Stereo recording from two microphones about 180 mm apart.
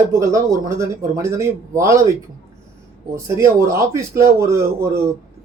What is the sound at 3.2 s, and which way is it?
Speech, 15° right (ahead or behind).